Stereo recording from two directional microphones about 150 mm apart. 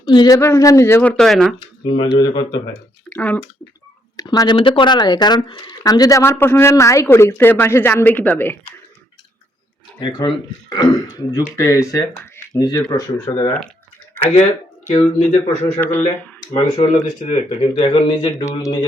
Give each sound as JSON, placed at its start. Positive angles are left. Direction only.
{"t": 0.0, "sound": "speech", "side_deg": 30}
{"t": 0.3, "sound": "speech", "side_deg": 20}
{"t": 1.1, "sound": "speech", "side_deg": 5}
{"t": 1.8, "sound": "speech", "side_deg": 35}
{"t": 3.1, "sound": "speech", "side_deg": 10}
{"t": 4.2, "sound": "speech", "side_deg": 25}
{"t": 10.0, "sound": "speech", "side_deg": 30}
{"t": 14.8, "sound": "speech", "side_deg": 50}
{"t": 17.9, "sound": "speech", "side_deg": 35}
{"t": 18.4, "sound": "speech", "side_deg": 20}